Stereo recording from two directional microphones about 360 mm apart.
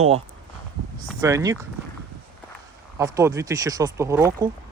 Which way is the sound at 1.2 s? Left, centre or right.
Centre.